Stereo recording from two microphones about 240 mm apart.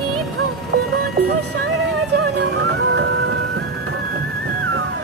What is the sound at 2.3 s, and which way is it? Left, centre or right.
Music, right.